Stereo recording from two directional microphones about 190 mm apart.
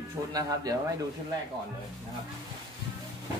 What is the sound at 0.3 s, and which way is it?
Speech, 20° right (ahead or behind).